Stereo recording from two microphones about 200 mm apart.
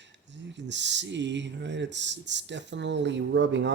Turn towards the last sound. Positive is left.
turn(degrees=-60)  # may be behind; listen again after turning